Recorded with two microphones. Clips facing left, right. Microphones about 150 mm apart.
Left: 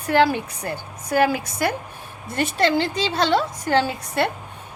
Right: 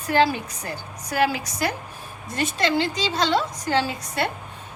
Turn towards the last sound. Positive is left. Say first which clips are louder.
# left 3 dB
turn(degrees=55)  # may be behind; listen again after turning